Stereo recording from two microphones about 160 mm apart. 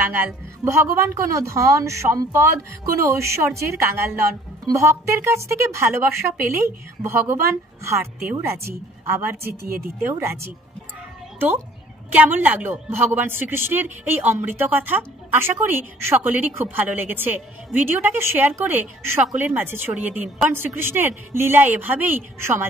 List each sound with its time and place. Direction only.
0.0 s a woman's voice: 10° right (ahead or behind)